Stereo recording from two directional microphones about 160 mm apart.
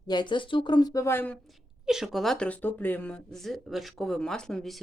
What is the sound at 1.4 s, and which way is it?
Speech, 5° right (ahead or behind).